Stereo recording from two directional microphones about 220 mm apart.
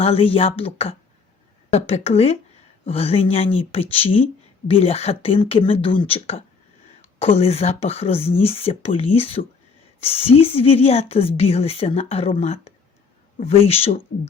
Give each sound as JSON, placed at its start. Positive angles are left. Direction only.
{"t": 0.0, "sound": "a woman's voice", "side_deg": 25}